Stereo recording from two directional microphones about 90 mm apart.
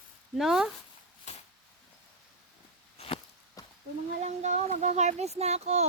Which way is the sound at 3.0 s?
90° left.